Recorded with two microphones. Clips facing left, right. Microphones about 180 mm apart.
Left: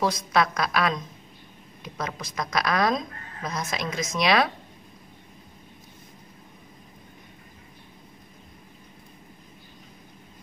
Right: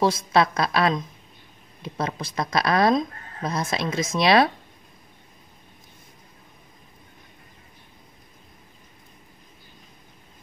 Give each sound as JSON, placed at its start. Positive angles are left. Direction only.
{"t": 0.0, "sound": "a woman's voice", "side_deg": -30}